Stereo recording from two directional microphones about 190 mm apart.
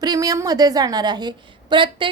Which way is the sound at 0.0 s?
20° right (ahead or behind).